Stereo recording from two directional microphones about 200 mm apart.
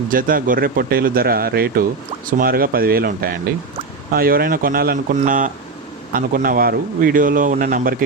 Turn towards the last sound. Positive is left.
turn(degrees=-40)  # may be behind; listen again after turning